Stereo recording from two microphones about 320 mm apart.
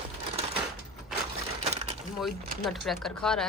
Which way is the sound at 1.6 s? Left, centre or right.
Centre.